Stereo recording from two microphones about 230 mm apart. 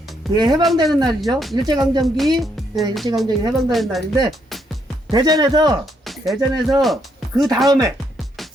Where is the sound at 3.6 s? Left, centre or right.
Centre.